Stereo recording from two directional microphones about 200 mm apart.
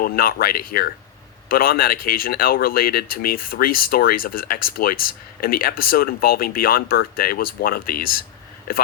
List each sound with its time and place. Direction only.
0.0 s speech: 45° left (ahead or behind)